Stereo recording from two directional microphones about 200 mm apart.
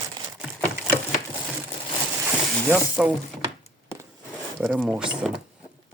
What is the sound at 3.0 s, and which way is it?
Speech, 5° right (ahead or behind).